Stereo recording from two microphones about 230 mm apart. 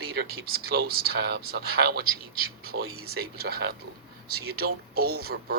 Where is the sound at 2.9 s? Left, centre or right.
Right.